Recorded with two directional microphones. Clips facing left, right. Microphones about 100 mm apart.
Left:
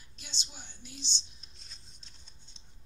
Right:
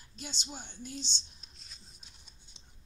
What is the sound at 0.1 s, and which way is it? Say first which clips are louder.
Speech: right 7 dB; 45° right (ahead or behind).